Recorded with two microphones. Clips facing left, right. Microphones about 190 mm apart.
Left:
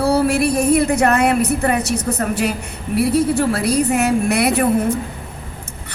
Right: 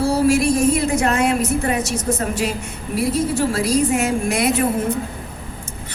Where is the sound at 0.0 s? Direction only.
60° left (ahead or behind).